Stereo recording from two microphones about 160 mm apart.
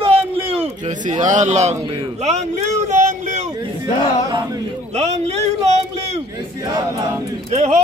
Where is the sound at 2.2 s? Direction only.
45° right (ahead or behind).